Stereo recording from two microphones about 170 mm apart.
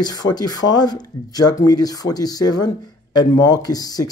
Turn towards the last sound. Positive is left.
turn(degrees=20)  # may be behind; listen again after turning